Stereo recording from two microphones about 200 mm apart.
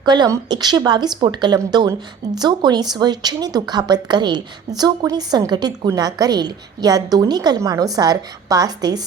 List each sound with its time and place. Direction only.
0.0 s a woman's voice: 20° right (ahead or behind)